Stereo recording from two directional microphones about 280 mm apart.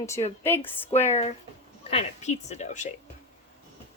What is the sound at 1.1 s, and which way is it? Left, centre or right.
A woman's voice, left.